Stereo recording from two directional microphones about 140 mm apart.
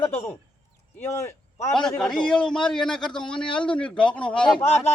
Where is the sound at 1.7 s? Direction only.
5° left (ahead or behind).